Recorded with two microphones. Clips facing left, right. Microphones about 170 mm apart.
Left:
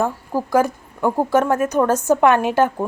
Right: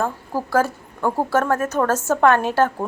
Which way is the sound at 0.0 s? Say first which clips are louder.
Left 3 dB; 15° left (ahead or behind).